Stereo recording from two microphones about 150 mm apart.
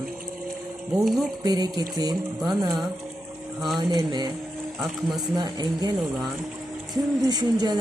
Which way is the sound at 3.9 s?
25° right (ahead or behind).